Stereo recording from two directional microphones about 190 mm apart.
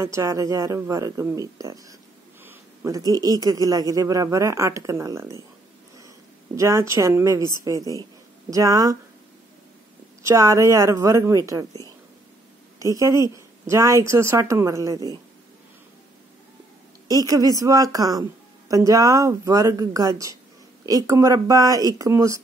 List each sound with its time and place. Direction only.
0.0 s speech: 15° right (ahead or behind)
10.2 s speech: 15° right (ahead or behind)
12.7 s a woman's voice: 15° right (ahead or behind)
17.3 s speech: 20° right (ahead or behind)